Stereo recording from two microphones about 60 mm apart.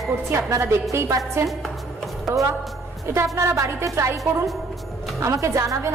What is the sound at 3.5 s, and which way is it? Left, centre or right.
Speech, right.